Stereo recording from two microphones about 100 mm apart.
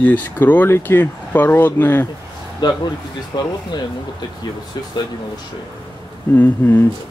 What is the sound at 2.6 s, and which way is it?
Speech, 45° left (ahead or behind).